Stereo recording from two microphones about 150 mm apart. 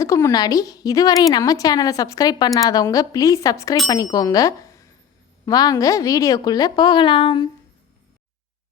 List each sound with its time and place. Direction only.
0.0 s a woman's voice: 20° left (ahead or behind)